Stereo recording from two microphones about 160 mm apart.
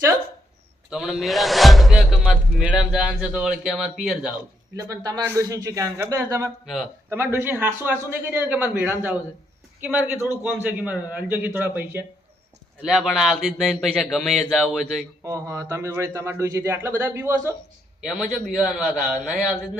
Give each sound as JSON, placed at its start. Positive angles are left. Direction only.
{"t": 0.9, "sound": "speech", "side_deg": 0}
{"t": 4.8, "sound": "a man's voice", "side_deg": -20}
{"t": 12.8, "sound": "speech", "side_deg": 0}
{"t": 15.2, "sound": "a man's voice", "side_deg": -20}
{"t": 18.0, "sound": "speech", "side_deg": 0}